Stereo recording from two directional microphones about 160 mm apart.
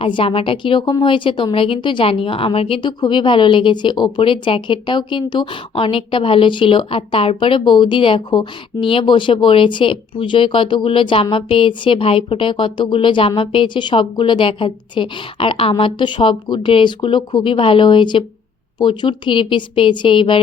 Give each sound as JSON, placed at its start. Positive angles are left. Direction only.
{"t": 0.0, "sound": "a woman's voice", "side_deg": 35}